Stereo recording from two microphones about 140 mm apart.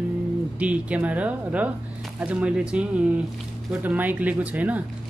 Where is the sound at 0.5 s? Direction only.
10° right (ahead or behind).